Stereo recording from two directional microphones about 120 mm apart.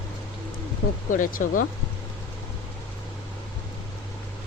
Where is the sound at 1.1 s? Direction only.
90° left.